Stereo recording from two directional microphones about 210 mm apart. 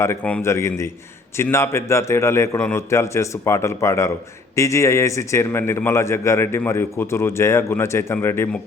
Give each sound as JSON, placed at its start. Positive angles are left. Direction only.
{"t": 0.0, "sound": "a man's voice", "side_deg": 10}